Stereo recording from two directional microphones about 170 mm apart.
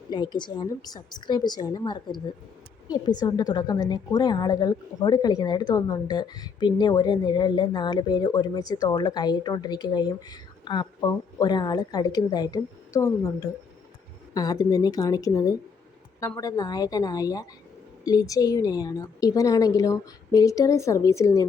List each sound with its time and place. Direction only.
0.1 s a woman's voice: 25° left (ahead or behind)